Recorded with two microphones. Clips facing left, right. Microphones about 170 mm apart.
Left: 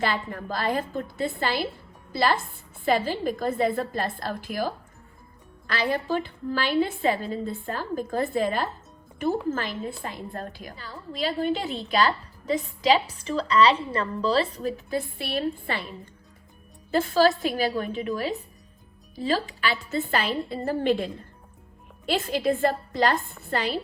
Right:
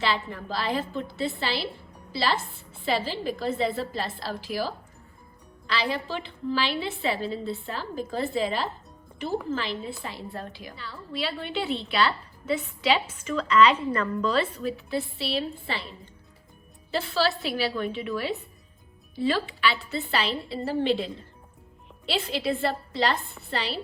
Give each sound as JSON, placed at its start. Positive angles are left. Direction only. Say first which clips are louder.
{"t": 0.0, "sound": "a woman's voice", "louder": "left 1 dB", "side_deg": 50}
{"t": 16.9, "sound": "a woman's voice", "louder": "left 5 dB", "side_deg": 45}